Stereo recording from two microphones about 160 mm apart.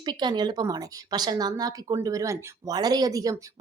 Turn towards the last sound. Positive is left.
turn(degrees=-20)  # may be behind; listen again after turning